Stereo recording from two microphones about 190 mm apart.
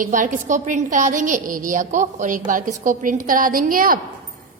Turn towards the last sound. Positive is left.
turn(degrees=-50)  # may be behind; listen again after turning